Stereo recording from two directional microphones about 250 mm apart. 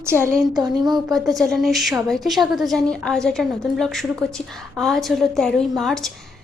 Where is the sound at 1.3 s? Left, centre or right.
Centre.